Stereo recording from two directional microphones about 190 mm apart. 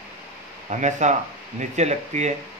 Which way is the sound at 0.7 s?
40° right (ahead or behind).